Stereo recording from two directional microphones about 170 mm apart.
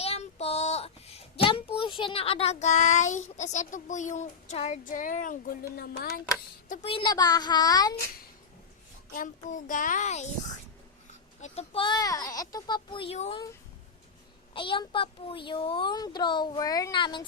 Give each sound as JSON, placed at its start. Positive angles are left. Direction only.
{"t": 0.0, "sound": "a child's voice", "side_deg": 35}
{"t": 5.7, "sound": "speech", "side_deg": 60}
{"t": 6.9, "sound": "a child's voice", "side_deg": 25}
{"t": 9.1, "sound": "a child's voice", "side_deg": 50}
{"t": 11.3, "sound": "a child's voice", "side_deg": 40}
{"t": 14.5, "sound": "a child's voice", "side_deg": 30}